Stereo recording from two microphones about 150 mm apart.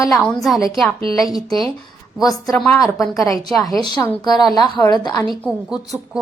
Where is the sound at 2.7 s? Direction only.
Centre (ahead or behind).